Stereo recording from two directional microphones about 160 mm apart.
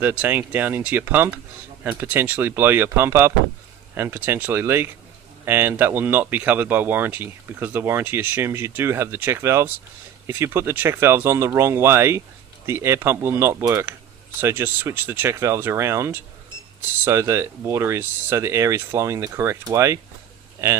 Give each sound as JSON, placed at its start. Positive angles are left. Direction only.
{"t": 0.0, "sound": "speech", "side_deg": -10}